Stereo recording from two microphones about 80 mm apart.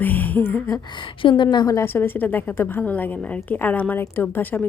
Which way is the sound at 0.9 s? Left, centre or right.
Left.